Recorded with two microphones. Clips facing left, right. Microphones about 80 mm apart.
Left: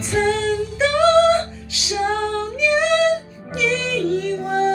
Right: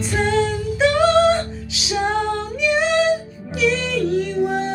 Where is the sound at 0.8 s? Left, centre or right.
Centre.